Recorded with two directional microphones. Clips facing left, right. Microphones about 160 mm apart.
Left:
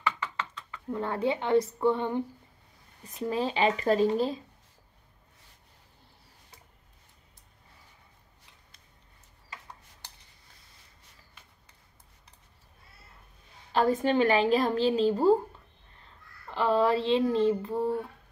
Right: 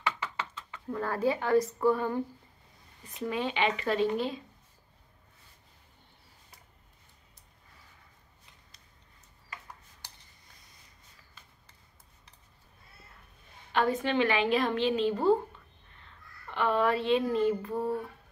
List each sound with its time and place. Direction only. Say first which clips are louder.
0.8 s a woman's voice: even; 20° left (ahead or behind)
3.3 s a woman's voice: left 3 dB; 35° left (ahead or behind)
13.7 s a woman's voice: left 3 dB; 40° left (ahead or behind)